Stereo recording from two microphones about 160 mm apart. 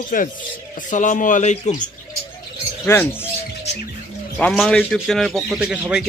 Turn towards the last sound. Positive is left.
turn(degrees=-5)  # may be behind; listen again after turning